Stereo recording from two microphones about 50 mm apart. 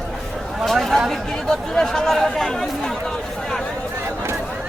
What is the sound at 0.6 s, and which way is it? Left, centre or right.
Speech, centre.